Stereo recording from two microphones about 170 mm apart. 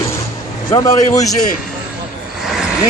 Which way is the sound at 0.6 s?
20° left (ahead or behind).